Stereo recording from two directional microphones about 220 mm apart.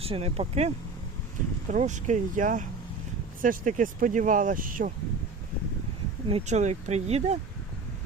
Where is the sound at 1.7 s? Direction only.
35° right (ahead or behind).